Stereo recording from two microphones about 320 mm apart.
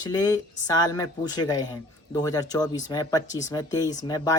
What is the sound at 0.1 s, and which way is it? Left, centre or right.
Speech, centre.